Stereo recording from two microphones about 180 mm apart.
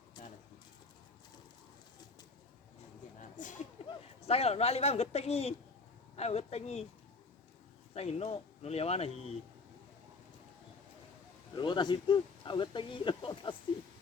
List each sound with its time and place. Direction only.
3.2 s a sound: 45° left (ahead or behind)
4.3 s speech: 35° left (ahead or behind)
7.9 s speech: 35° left (ahead or behind)
11.5 s speech: 25° left (ahead or behind)